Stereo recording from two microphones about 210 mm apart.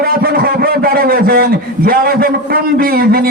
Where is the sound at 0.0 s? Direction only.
45° right (ahead or behind).